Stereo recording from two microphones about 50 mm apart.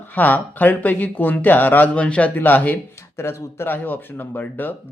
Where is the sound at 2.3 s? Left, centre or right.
Left.